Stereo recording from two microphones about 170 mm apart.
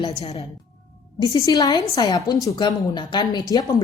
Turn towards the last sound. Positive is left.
turn(degrees=25)  # may be behind; listen again after turning